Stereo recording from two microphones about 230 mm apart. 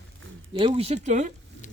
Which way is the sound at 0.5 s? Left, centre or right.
Right.